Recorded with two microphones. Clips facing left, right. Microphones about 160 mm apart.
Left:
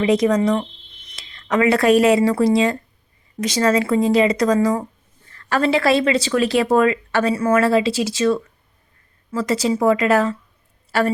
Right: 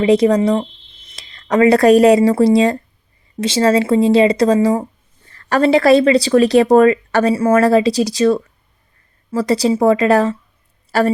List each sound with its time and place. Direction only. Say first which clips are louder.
0.0 s speech: right 4 dB; 30° right (ahead or behind)